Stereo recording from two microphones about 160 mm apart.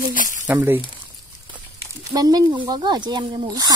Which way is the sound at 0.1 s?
55° left (ahead or behind).